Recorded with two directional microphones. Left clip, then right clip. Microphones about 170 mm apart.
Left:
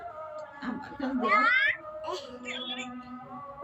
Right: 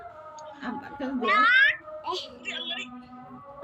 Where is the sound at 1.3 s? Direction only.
10° right (ahead or behind).